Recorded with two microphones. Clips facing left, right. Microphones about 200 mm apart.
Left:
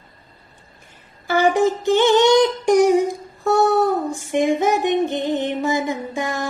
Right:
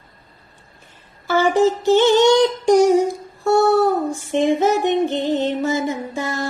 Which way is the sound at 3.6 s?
15° left (ahead or behind).